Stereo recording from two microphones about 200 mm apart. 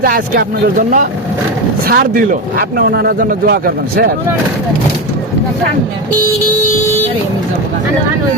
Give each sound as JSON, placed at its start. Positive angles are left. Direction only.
{"t": 0.0, "sound": "speech", "side_deg": -45}